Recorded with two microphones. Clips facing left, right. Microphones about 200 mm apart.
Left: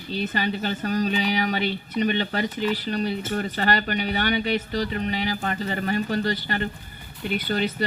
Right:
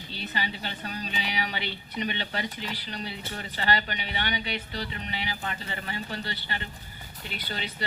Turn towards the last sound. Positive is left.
turn(degrees=50)  # may be behind; listen again after turning